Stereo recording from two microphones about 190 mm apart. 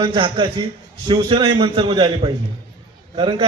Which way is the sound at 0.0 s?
25° right (ahead or behind).